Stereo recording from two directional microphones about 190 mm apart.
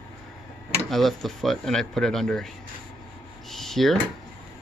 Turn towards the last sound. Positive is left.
turn(degrees=0)  # may be behind; listen again after turning